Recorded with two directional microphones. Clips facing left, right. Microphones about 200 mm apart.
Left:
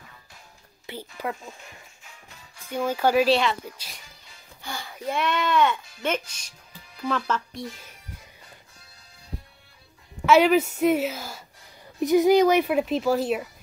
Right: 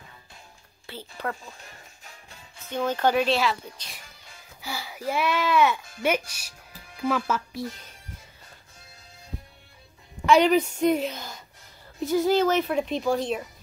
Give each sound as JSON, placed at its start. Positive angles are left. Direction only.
{"t": 0.8, "sound": "speech", "side_deg": 10}
{"t": 2.0, "sound": "music", "side_deg": -30}
{"t": 2.7, "sound": "speech", "side_deg": 10}
{"t": 10.2, "sound": "a woman's voice", "side_deg": 5}